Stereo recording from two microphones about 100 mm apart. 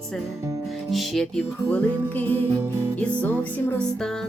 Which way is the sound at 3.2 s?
15° left (ahead or behind).